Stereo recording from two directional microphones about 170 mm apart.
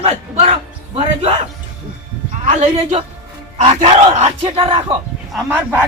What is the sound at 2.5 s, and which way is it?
Battle cry, 40° right (ahead or behind).